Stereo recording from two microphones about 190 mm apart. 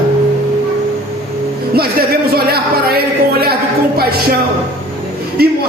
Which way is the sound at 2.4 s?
50° right (ahead or behind).